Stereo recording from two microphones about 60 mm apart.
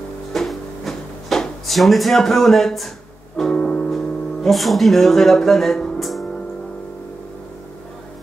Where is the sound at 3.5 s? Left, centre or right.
Centre.